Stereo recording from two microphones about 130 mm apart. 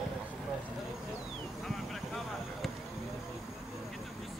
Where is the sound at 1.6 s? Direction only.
Centre (ahead or behind).